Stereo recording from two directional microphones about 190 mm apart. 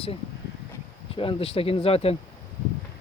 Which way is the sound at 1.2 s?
30° left (ahead or behind).